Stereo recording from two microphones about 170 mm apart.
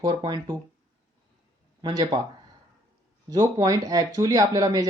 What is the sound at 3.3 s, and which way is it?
Speech, 20° right (ahead or behind).